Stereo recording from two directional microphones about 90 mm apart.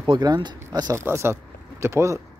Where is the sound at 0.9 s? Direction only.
30° right (ahead or behind).